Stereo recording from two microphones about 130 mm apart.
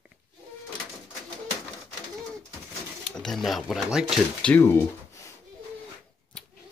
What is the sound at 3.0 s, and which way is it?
Speech, 5° left (ahead or behind).